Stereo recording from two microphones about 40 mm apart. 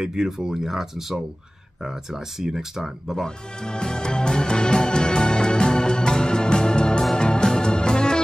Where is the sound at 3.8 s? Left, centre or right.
Centre.